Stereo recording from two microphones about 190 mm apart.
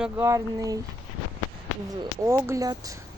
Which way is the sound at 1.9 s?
15° right (ahead or behind).